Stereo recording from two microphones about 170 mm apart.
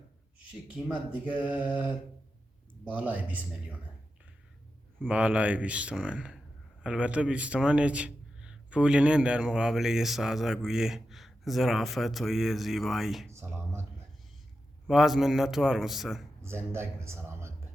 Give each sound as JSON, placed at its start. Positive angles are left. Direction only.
{"t": 0.7, "sound": "speech", "side_deg": -5}
{"t": 5.0, "sound": "a man's voice", "side_deg": -5}
{"t": 13.3, "sound": "a sound", "side_deg": -15}
{"t": 14.8, "sound": "a man's voice", "side_deg": 0}
{"t": 16.7, "sound": "a man's voice", "side_deg": -15}